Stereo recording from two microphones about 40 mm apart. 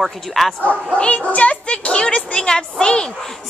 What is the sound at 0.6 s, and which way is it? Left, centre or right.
Speech, left.